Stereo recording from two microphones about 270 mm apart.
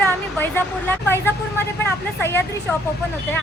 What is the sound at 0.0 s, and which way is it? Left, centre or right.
Speech, centre.